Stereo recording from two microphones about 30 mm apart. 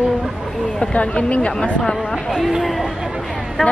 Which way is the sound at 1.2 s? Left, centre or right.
Left.